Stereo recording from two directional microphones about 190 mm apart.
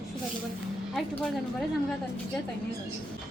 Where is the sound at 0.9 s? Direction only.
Centre (ahead or behind).